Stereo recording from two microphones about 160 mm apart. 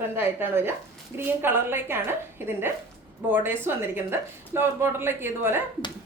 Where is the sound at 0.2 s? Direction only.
15° right (ahead or behind).